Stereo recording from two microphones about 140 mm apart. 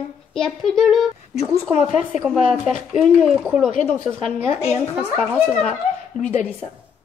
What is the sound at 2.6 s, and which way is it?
Speech, centre (ahead or behind).